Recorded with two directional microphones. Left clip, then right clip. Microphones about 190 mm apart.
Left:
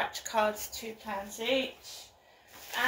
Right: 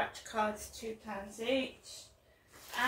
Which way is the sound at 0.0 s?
15° right (ahead or behind).